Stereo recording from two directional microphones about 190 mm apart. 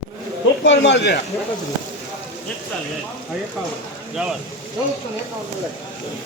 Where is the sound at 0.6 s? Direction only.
70° left (ahead or behind).